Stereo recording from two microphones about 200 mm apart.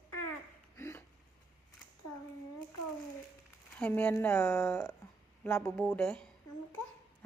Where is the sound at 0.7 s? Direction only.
15° left (ahead or behind).